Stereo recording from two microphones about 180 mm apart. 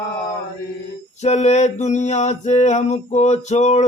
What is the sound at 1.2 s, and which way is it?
Mantra, 40° left (ahead or behind).